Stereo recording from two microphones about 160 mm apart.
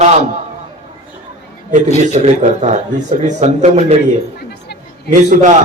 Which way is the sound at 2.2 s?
45° right (ahead or behind).